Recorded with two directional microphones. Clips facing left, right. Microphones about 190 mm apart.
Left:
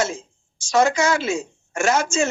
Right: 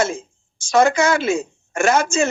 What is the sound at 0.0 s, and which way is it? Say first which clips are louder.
A woman's voice: right 3 dB; 55° right (ahead or behind).